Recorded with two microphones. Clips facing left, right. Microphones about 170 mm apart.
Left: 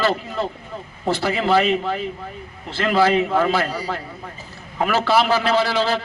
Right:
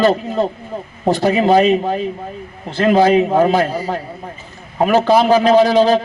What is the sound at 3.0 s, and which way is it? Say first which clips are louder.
Speech: right 4 dB; 20° right (ahead or behind).